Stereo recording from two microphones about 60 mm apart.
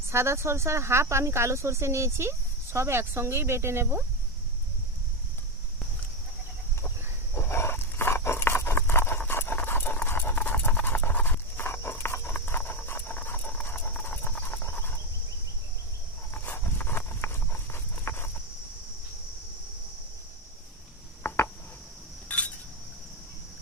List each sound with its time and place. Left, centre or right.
0.1 s speech: right
7.3 s a sound: left
9.3 s squeal: left
9.6 s horse: left
10.1 s clip-clop: left
12.5 s dog: left
13.6 s clip-clop: left
16.3 s horse: left
21.2 s a sound: left
22.3 s wind chime: left